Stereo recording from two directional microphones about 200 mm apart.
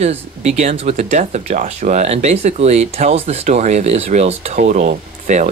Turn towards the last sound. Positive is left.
turn(degrees=-35)  # may be behind; listen again after turning